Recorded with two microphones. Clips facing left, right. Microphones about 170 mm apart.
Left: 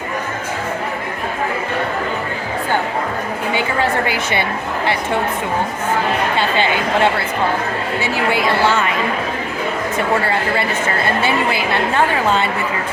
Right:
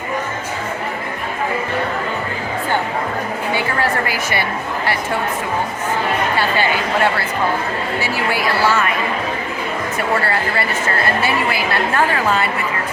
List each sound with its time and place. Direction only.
3.5 s a woman's voice: 20° left (ahead or behind)
6.3 s a woman's voice: 20° left (ahead or behind)